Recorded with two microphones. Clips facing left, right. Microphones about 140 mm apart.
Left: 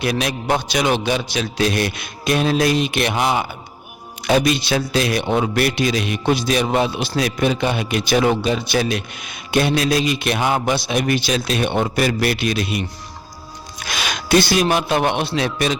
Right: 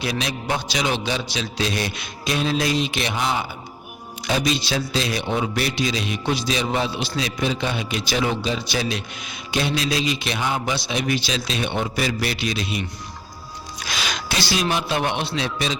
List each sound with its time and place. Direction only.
0.0 s a man's voice: 55° left (ahead or behind)